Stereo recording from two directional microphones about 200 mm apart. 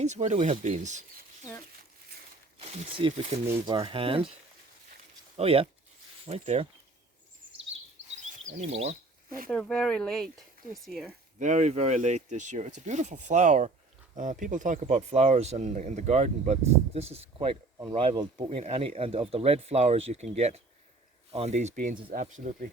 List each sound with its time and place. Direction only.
0.0 s speech: 35° right (ahead or behind)
2.6 s speech: 30° right (ahead or behind)
3.4 s speech: 20° right (ahead or behind)
5.4 s speech: 30° right (ahead or behind)
8.1 s a sound: 40° right (ahead or behind)
9.5 s speech: 5° left (ahead or behind)
11.3 s speech: 35° right (ahead or behind)